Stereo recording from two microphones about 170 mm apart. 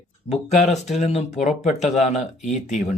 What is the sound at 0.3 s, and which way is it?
Speech, 40° left (ahead or behind).